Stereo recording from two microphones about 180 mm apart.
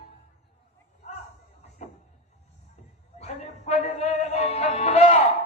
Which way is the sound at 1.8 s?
40° left (ahead or behind).